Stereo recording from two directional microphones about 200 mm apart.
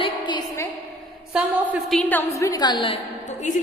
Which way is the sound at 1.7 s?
5° left (ahead or behind).